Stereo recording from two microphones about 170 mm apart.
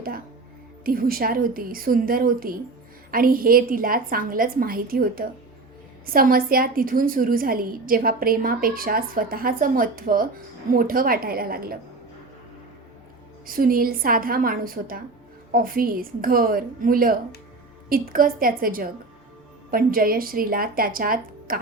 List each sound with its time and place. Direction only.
0.9 s a woman's voice: 60° right (ahead or behind)
13.5 s a woman's voice: 60° right (ahead or behind)